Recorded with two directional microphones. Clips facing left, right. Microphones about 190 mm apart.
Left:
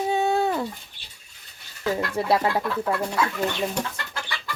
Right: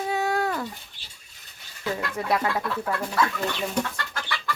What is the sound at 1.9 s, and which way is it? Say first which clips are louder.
Speech: left 4 dB; 30° left (ahead or behind).